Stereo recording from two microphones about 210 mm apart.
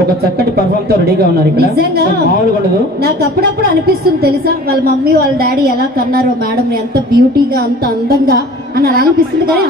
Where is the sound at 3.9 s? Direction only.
50° right (ahead or behind).